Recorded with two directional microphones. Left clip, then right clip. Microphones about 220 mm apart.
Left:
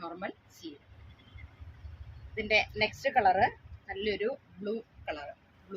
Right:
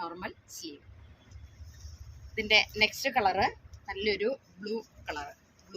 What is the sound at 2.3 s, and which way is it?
A woman's voice, 10° left (ahead or behind).